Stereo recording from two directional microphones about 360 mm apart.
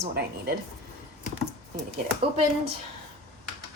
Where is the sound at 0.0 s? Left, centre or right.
Right.